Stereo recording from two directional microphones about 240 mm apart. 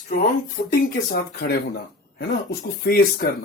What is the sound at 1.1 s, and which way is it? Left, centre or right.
Speech, left.